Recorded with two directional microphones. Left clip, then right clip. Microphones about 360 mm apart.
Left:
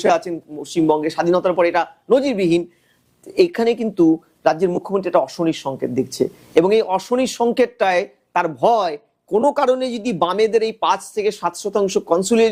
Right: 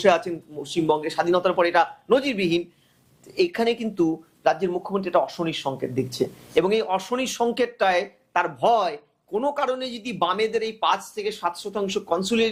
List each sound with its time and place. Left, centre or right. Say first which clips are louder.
0.0 s speech: left 2 dB; left